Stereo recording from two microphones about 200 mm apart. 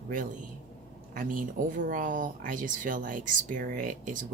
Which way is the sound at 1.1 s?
40° right (ahead or behind).